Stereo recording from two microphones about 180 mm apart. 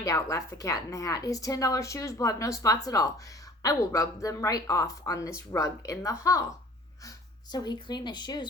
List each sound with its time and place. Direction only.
0.0 s a woman's voice: 20° left (ahead or behind)
7.5 s speech: 25° left (ahead or behind)